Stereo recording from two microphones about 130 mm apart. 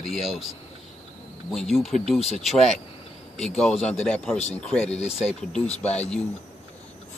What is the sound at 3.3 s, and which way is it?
Speech, 5° left (ahead or behind).